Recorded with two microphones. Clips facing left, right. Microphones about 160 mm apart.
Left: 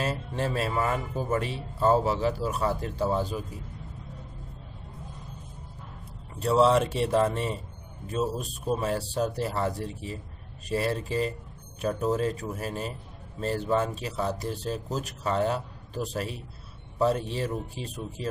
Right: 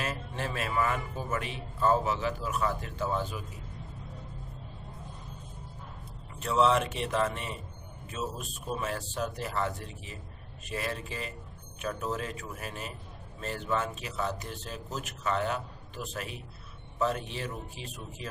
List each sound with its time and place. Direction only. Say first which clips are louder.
0.0 s speech: left 5 dB; 30° left (ahead or behind)
6.4 s speech: left 4 dB; 35° left (ahead or behind)